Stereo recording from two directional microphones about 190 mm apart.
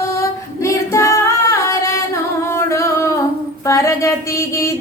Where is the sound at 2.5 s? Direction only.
15° left (ahead or behind).